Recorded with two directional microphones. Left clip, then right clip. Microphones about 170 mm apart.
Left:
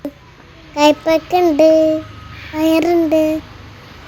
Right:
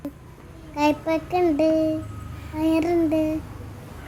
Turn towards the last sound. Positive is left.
turn(degrees=20)  # may be behind; listen again after turning